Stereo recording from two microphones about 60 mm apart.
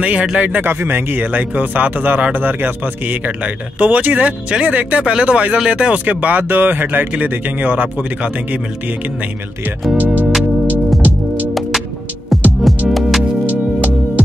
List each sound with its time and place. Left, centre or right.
0.0 s speech: right
9.9 s speech: right
12.6 s music: centre